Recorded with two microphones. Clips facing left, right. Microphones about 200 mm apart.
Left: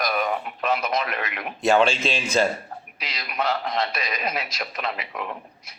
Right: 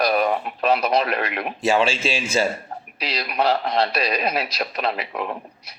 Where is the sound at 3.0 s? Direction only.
35° right (ahead or behind).